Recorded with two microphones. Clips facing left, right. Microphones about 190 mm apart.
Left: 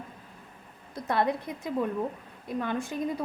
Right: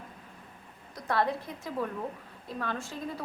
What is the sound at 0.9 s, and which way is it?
A woman's voice, 20° left (ahead or behind).